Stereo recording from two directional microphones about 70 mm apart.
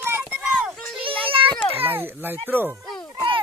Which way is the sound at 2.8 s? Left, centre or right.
Centre.